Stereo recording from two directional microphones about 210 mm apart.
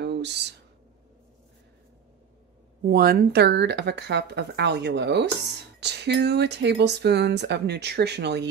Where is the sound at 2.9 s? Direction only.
45° right (ahead or behind).